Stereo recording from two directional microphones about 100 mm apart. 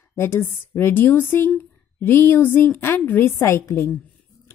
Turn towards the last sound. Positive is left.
turn(degrees=25)  # may be behind; listen again after turning